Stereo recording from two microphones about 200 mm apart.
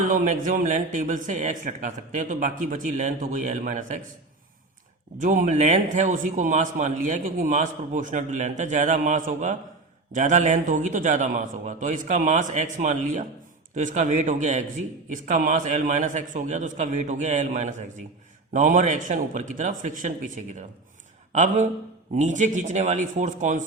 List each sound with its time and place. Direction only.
0.1 s a man's voice: 40° right (ahead or behind)
5.2 s a man's voice: 40° right (ahead or behind)